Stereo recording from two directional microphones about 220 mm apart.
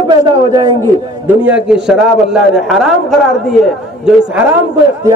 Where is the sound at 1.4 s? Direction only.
5° right (ahead or behind).